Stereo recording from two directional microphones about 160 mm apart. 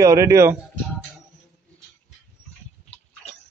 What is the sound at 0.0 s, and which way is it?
Speech, 20° right (ahead or behind).